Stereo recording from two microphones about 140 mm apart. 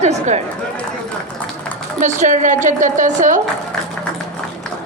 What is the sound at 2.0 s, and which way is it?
A woman's voice, 60° right (ahead or behind).